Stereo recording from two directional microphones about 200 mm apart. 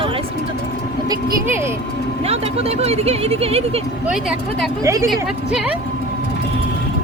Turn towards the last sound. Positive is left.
turn(degrees=-5)  # may be behind; listen again after turning